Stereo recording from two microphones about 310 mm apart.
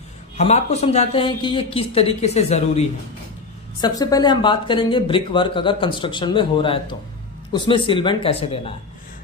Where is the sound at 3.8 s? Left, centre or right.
Centre.